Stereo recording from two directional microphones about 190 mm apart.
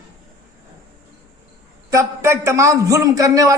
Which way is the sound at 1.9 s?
15° right (ahead or behind).